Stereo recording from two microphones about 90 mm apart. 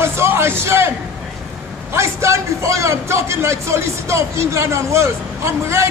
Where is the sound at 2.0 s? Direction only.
35° right (ahead or behind).